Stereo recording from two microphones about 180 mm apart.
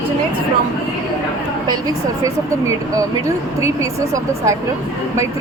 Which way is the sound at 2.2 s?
20° right (ahead or behind).